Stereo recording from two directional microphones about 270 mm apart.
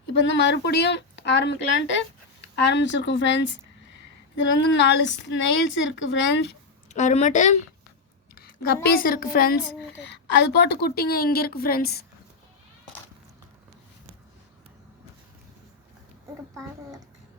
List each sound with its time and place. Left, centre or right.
0.1 s a woman's voice: left
4.7 s a woman's voice: left
6.8 s a woman's voice: left